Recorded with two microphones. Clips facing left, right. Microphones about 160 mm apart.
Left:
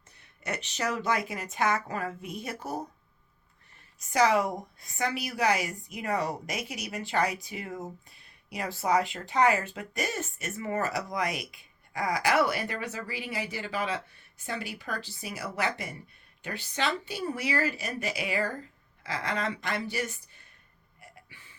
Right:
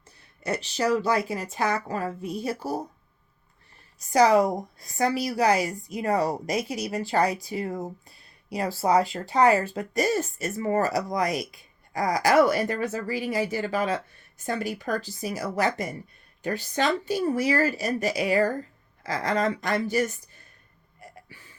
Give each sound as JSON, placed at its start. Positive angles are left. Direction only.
{"t": 0.2, "sound": "speech", "side_deg": -35}
{"t": 4.1, "sound": "speech", "side_deg": -35}
{"t": 21.0, "sound": "a sound", "side_deg": -40}